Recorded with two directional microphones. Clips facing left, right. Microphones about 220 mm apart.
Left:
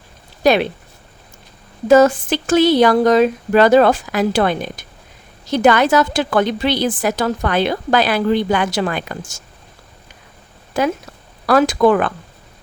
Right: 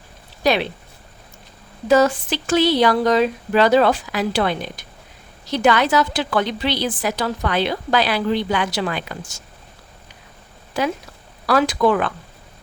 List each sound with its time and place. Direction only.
0.4 s a woman's voice: 50° left (ahead or behind)
1.9 s a woman's voice: 45° left (ahead or behind)
10.8 s a woman's voice: 45° left (ahead or behind)